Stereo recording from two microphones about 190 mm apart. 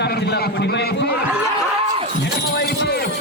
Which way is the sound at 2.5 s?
55° left (ahead or behind).